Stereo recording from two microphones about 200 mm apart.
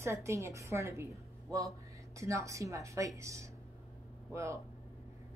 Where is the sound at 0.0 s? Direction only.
15° right (ahead or behind).